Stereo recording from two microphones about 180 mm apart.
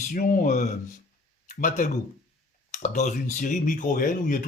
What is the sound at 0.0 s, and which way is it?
Speech, 50° left (ahead or behind).